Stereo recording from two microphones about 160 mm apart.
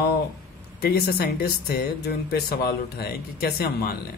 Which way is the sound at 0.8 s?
80° left.